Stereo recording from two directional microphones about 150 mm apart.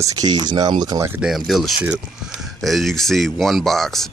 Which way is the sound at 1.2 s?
Centre (ahead or behind).